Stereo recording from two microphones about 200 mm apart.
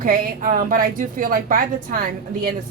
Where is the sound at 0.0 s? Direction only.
45° right (ahead or behind).